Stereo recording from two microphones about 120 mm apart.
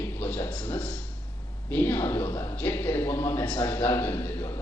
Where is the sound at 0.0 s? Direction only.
15° left (ahead or behind).